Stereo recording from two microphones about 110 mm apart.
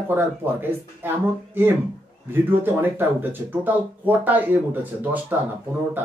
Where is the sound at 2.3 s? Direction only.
20° right (ahead or behind).